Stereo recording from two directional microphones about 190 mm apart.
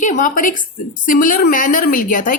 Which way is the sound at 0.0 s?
40° left (ahead or behind).